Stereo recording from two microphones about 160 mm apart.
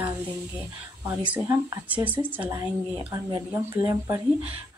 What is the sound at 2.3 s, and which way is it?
Speech, 10° right (ahead or behind).